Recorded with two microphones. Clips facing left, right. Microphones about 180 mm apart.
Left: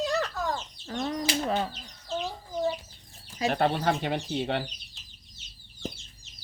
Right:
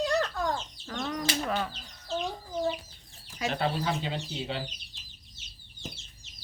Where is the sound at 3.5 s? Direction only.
55° left (ahead or behind).